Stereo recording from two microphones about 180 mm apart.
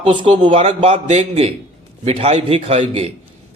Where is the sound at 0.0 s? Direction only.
25° right (ahead or behind).